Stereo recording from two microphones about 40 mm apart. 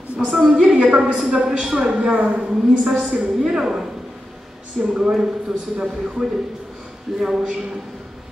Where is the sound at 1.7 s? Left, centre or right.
Right.